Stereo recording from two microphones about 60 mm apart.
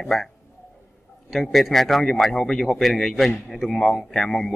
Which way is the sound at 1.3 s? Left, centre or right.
Centre.